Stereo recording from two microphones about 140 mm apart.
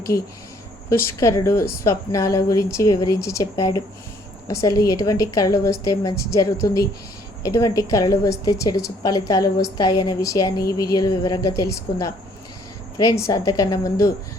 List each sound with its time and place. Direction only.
0.9 s a woman's voice: 20° left (ahead or behind)